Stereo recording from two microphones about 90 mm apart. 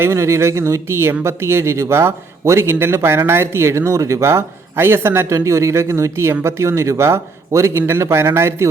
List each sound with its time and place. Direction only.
0.0 s speech: 30° right (ahead or behind)